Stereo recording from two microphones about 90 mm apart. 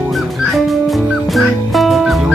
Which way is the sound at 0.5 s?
Centre (ahead or behind).